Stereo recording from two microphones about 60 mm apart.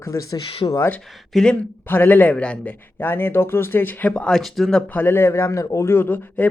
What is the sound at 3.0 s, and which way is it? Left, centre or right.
Speech, left.